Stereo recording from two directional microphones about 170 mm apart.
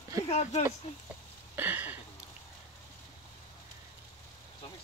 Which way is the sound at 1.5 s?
10° right (ahead or behind).